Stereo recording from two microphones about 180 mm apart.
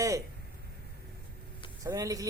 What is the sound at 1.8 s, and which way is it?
Speech, 20° right (ahead or behind).